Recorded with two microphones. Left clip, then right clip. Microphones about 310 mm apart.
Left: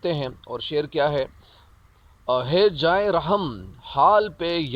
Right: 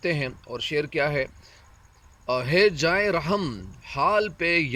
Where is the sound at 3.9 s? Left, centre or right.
Centre.